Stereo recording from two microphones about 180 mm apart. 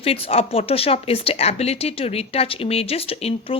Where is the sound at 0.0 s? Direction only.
35° left (ahead or behind).